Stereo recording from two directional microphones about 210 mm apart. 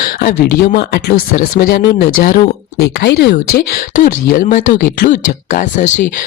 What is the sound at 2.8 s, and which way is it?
Speech, 50° left (ahead or behind).